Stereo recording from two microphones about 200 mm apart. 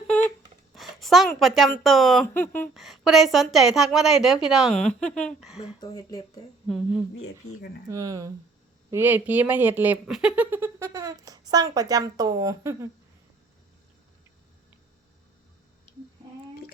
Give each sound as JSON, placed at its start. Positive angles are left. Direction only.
{"t": 0.7, "sound": "a sound", "side_deg": 0}
{"t": 1.4, "sound": "a woman's voice", "side_deg": 0}
{"t": 5.8, "sound": "speech", "side_deg": 20}
{"t": 6.7, "sound": "a woman's voice", "side_deg": 0}
{"t": 7.9, "sound": "speech", "side_deg": -15}